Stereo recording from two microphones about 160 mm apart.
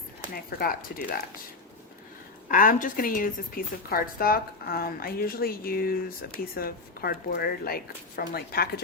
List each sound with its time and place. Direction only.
0.3 s speech: 65° left (ahead or behind)
2.5 s a woman's voice: 60° left (ahead or behind); by 8.8 s 75° left (ahead or behind)